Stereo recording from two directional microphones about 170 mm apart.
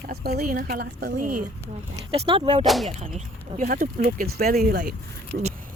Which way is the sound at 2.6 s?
Centre (ahead or behind).